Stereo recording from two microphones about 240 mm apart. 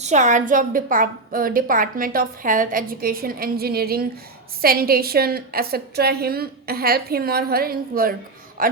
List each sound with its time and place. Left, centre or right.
0.0 s a woman's voice: right